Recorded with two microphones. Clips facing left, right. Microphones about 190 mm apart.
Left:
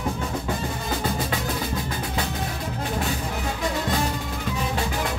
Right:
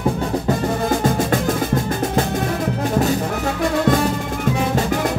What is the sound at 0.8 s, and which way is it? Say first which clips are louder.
Music: right 8 dB; 45° right (ahead or behind).